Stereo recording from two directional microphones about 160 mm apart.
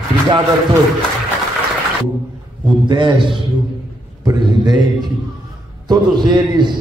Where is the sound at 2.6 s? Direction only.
30° right (ahead or behind).